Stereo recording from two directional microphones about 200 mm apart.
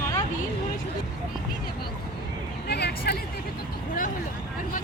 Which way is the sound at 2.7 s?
55° left (ahead or behind).